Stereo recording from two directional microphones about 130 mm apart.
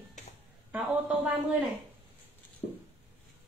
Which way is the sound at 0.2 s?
70° left (ahead or behind).